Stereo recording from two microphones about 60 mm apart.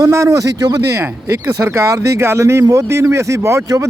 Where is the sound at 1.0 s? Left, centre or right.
Right.